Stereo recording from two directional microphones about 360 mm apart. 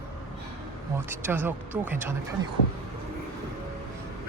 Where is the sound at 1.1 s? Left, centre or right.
Centre.